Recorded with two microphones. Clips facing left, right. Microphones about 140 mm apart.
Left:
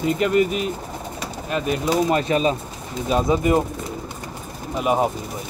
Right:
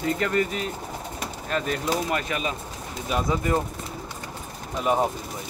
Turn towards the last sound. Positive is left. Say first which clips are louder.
# left 3 dB
turn(degrees=15)  # may be behind; listen again after turning